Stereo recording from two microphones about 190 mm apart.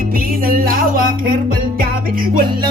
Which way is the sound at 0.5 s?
50° right (ahead or behind).